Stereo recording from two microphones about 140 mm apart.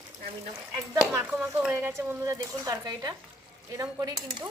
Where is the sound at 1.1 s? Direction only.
10° right (ahead or behind).